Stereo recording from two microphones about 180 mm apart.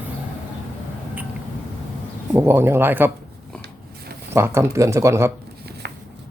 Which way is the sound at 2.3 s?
15° right (ahead or behind).